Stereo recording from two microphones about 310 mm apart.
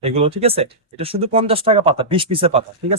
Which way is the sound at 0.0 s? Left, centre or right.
Centre.